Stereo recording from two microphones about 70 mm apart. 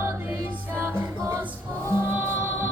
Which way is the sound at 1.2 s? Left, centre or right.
Right.